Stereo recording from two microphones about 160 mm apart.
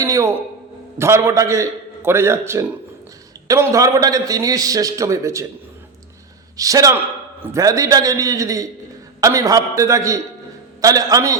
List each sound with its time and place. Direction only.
0.0 s a sound: 20° right (ahead or behind)
0.9 s a man's voice: 15° right (ahead or behind)
6.6 s a man's voice: 20° right (ahead or behind)